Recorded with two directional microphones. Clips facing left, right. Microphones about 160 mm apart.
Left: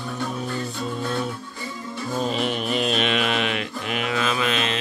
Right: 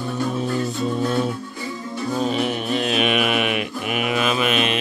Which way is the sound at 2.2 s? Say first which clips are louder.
Right 1 dB; 5° right (ahead or behind).